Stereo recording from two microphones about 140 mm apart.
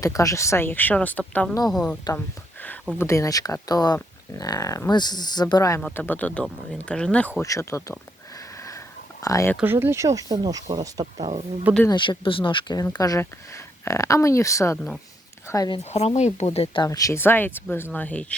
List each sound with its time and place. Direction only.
0.0 s speech: 25° left (ahead or behind); by 2.0 s 5° left (ahead or behind)
2.1 s a sound: 10° left (ahead or behind)
3.0 s speech: 20° left (ahead or behind)
5.8 s speech: 10° left (ahead or behind)
7.4 s speech: 20° left (ahead or behind)
8.5 s sniff: 20° left (ahead or behind)
9.2 s speech: 25° left (ahead or behind)
9.6 s speech: 15° right (ahead or behind)
11.0 s speech: 45° right (ahead or behind)
11.9 s speech: 35° left (ahead or behind)
15.8 s speech: 50° left (ahead or behind)
16.8 s speech: 25° left (ahead or behind); by 18.3 s 10° left (ahead or behind)